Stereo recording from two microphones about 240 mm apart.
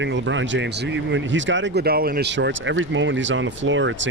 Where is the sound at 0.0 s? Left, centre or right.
Right.